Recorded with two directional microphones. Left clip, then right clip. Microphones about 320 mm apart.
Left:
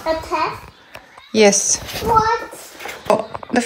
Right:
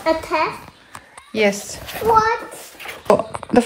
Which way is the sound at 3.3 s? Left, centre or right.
Right.